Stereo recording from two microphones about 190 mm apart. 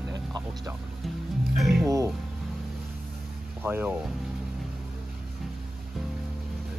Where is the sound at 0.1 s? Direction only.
20° right (ahead or behind).